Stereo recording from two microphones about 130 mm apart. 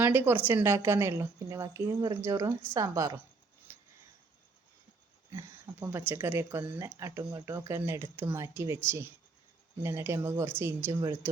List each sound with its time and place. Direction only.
0.0 s a woman's voice: 15° right (ahead or behind)
5.3 s a woman's voice: 20° right (ahead or behind)